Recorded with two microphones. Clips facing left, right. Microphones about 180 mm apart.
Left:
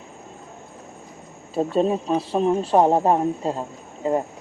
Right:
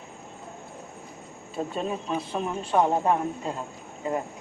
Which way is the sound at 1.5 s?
35° left (ahead or behind).